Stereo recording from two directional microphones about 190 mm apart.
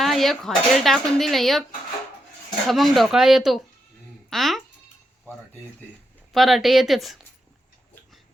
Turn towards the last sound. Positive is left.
turn(degrees=0)  # may be behind; listen again after turning